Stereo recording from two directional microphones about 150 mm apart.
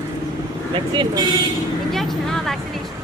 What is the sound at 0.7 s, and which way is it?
Vehicle, 30° right (ahead or behind).